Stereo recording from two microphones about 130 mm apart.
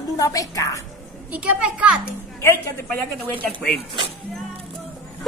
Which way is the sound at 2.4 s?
15° left (ahead or behind).